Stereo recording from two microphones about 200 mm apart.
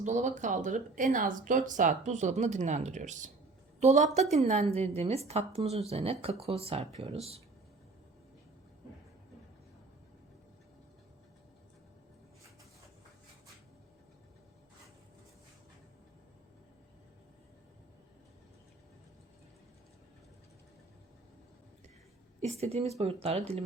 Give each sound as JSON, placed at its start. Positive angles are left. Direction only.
{"t": 0.0, "sound": "speech", "side_deg": -35}
{"t": 22.4, "sound": "speech", "side_deg": -35}